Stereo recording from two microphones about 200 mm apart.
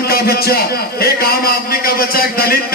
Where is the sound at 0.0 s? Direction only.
50° left (ahead or behind).